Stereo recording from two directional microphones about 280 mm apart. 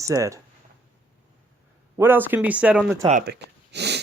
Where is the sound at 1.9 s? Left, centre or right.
Centre.